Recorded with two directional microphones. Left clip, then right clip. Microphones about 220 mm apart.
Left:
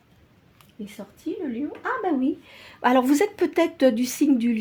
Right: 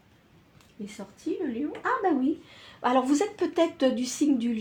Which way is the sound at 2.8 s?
45° left (ahead or behind).